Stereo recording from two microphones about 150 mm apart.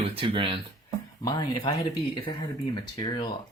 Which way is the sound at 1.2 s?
25° left (ahead or behind).